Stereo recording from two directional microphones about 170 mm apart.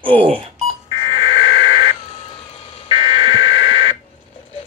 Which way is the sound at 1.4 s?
35° left (ahead or behind).